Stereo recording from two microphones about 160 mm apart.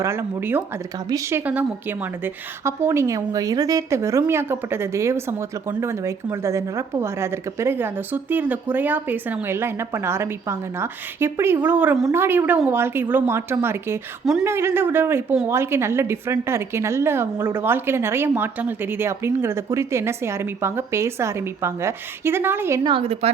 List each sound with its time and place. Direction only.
0.0 s a woman's voice: 15° right (ahead or behind)
22.8 s a woman's voice: 30° right (ahead or behind)